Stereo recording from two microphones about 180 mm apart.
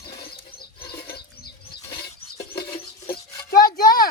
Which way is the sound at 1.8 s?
20° left (ahead or behind).